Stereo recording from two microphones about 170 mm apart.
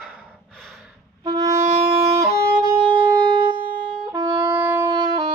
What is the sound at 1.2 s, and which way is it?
Music, 35° right (ahead or behind).